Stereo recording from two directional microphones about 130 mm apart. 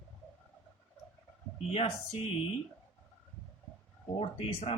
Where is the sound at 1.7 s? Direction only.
50° left (ahead or behind).